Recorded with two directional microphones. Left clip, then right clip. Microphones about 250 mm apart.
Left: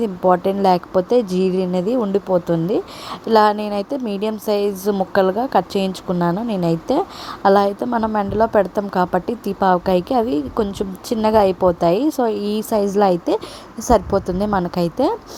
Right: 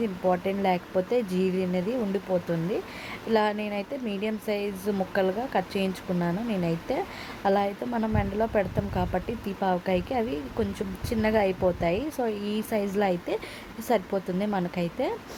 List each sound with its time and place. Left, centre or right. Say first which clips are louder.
0.0 s speech: left 10 dB; left
13.8 s a woman's voice: left 11 dB; centre
14.3 s speech: left 10 dB; left